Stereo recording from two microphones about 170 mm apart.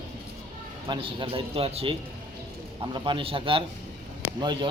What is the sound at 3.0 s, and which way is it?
A man's voice, 30° right (ahead or behind).